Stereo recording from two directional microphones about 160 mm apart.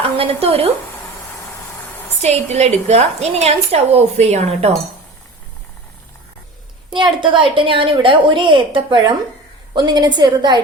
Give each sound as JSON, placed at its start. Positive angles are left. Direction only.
{"t": 0.2, "sound": "a woman's voice", "side_deg": -35}
{"t": 2.2, "sound": "a woman's voice", "side_deg": -45}
{"t": 6.9, "sound": "a woman's voice", "side_deg": -30}